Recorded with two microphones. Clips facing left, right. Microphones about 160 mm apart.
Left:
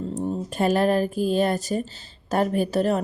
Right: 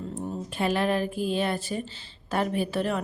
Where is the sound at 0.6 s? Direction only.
40° left (ahead or behind).